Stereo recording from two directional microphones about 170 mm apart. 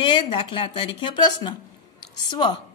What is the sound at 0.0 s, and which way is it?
A woman's voice, 30° left (ahead or behind).